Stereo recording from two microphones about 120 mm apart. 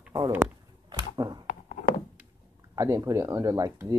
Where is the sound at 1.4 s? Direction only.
90° left.